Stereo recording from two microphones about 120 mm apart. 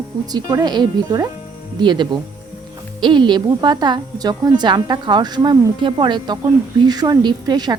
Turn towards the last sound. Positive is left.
turn(degrees=-35)  # may be behind; listen again after turning